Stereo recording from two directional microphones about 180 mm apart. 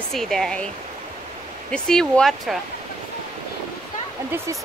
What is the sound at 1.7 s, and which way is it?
Speech, 5° left (ahead or behind).